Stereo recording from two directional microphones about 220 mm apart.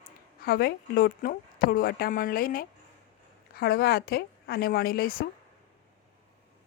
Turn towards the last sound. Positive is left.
turn(degrees=40)  # may be behind; listen again after turning